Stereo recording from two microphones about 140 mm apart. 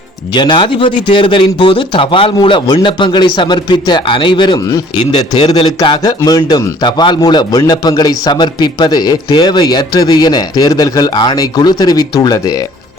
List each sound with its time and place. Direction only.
0.3 s a man's voice: 35° left (ahead or behind)